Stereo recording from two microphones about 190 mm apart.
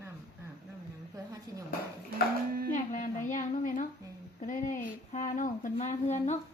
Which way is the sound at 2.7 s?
40° left (ahead or behind).